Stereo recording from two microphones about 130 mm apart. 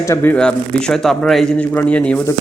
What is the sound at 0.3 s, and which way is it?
Speech, 5° left (ahead or behind).